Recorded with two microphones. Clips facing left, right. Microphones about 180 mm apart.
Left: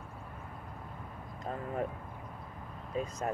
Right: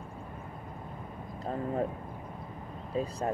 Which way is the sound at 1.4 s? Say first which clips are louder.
Right 4 dB; 30° right (ahead or behind).